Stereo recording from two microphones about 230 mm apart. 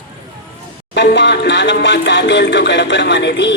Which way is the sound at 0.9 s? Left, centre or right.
Left.